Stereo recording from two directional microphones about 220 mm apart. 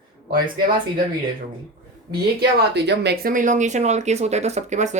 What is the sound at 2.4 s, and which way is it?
Speech, 50° right (ahead or behind).